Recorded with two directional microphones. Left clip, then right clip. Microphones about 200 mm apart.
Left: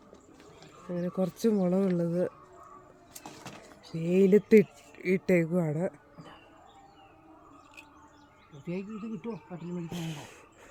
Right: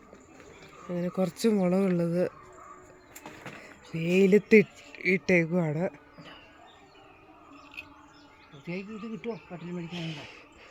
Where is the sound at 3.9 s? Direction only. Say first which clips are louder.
Right 1 dB; 5° left (ahead or behind).